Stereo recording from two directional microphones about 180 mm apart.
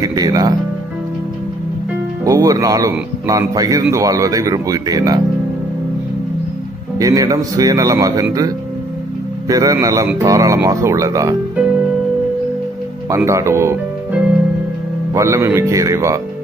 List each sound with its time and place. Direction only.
0.0 s a man's voice: 20° right (ahead or behind)
2.2 s a man's voice: 20° right (ahead or behind)
7.0 s a man's voice: 20° right (ahead or behind)
13.1 s speech: 15° right (ahead or behind)
15.1 s speech: 15° right (ahead or behind)